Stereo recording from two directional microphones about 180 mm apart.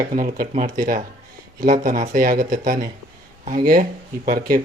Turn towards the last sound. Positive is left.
turn(degrees=-50)  # may be behind; listen again after turning